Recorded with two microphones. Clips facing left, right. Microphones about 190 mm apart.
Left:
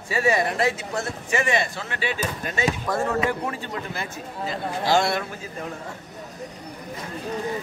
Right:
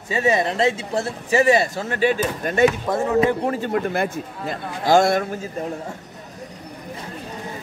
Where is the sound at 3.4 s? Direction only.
45° right (ahead or behind).